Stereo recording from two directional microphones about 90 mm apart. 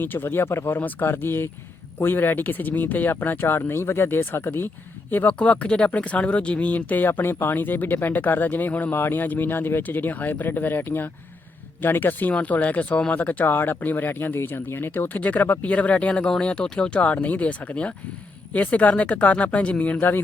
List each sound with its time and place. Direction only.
0.0 s speech: 25° left (ahead or behind)